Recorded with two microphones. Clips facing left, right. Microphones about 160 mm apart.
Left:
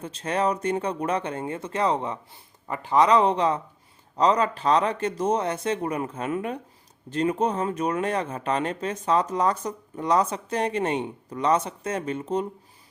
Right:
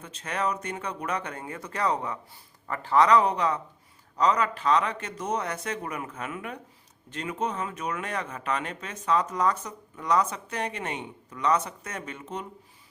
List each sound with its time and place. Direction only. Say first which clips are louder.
0.0 s speech: left 5 dB; 30° left (ahead or behind)